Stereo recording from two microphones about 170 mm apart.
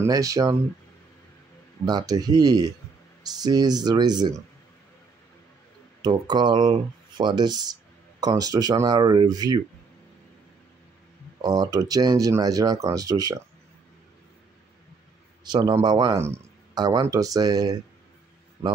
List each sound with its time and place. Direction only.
0.0 s speech: 20° right (ahead or behind)
1.9 s speech: 25° right (ahead or behind)
6.0 s speech: 25° right (ahead or behind)
11.4 s speech: 25° right (ahead or behind)
15.4 s speech: 25° right (ahead or behind)